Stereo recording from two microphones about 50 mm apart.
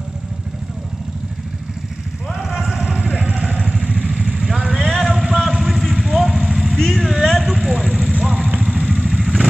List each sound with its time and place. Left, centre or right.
2.3 s vehicle: centre
2.9 s music: centre
3.6 s vehicle: centre
4.7 s vehicle: centre
5.1 s vehicle: centre
7.5 s vehicle: centre
8.6 s vehicle: centre